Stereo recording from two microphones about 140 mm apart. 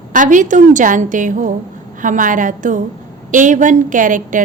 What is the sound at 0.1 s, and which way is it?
A woman's voice, 65° right (ahead or behind).